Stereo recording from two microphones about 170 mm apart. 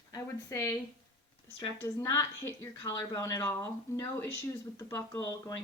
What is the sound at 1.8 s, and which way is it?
A woman's voice, 15° left (ahead or behind).